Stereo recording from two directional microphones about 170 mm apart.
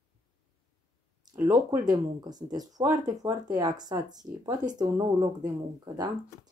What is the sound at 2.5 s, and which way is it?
Speech, 20° right (ahead or behind).